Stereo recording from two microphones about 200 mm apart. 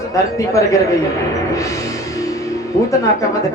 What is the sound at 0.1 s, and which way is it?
Speech, 15° left (ahead or behind).